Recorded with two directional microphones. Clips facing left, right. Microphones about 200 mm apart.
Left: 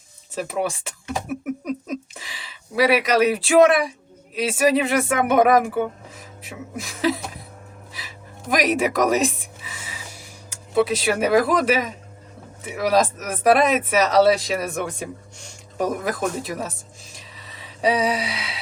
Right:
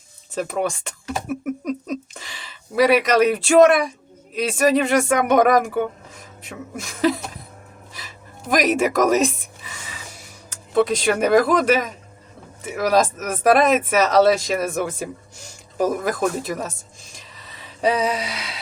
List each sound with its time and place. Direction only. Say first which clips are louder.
0.3 s speech: right 2 dB; 5° left (ahead or behind)
7.9 s a sound: even; centre (ahead or behind)
10.5 s speech: right 1 dB; 5° left (ahead or behind)